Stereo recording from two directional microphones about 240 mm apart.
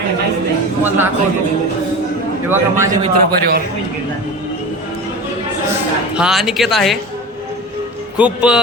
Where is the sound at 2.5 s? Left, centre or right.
Centre.